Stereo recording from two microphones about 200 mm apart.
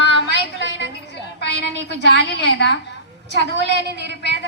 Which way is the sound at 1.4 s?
55° left (ahead or behind).